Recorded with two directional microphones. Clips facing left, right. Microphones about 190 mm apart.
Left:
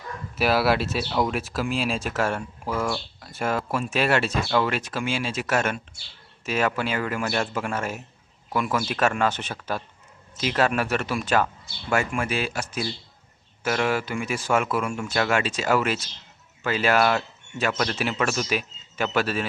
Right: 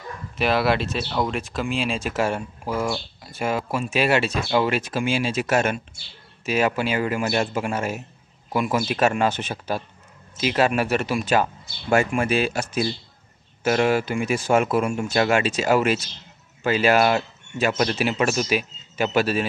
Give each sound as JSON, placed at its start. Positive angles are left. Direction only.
{"t": 0.4, "sound": "speech", "side_deg": 5}
{"t": 2.1, "sound": "speech", "side_deg": -10}